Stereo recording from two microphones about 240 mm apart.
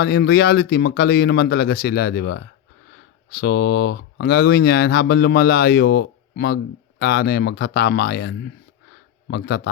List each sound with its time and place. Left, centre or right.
0.0 s speech: left